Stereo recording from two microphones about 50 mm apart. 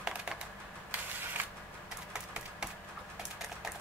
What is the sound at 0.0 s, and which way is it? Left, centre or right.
Typing, centre.